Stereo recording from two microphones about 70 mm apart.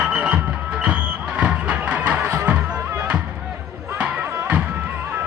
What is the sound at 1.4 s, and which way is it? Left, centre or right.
Music, right.